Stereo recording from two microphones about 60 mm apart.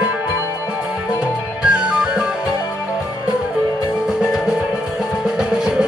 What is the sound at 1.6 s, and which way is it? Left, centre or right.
Music, centre.